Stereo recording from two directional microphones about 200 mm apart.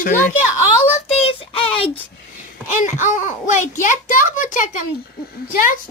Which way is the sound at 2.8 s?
40° left (ahead or behind).